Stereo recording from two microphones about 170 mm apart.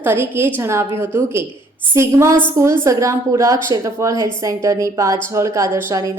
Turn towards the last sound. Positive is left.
turn(degrees=-20)  # may be behind; listen again after turning